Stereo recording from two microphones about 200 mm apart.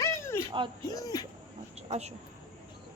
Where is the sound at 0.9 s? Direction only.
20° left (ahead or behind).